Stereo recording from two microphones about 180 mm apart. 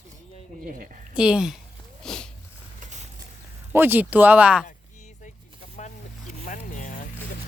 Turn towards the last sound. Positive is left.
turn(degrees=45)  # may be behind; listen again after turning